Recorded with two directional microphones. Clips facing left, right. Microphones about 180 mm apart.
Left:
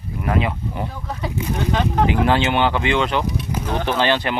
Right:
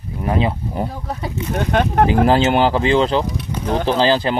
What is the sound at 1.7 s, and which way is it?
Speech, 60° right (ahead or behind).